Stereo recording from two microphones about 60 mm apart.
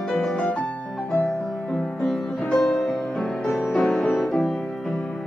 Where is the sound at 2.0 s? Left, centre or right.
Centre.